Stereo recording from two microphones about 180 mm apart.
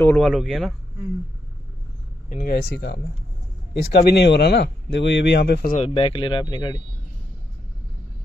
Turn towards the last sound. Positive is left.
turn(degrees=25)  # may be behind; listen again after turning